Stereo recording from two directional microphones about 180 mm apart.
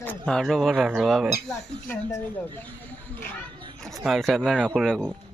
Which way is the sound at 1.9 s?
15° left (ahead or behind).